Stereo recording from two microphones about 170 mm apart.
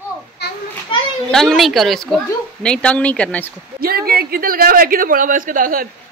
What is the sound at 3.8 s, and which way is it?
A woman's voice, 65° right (ahead or behind).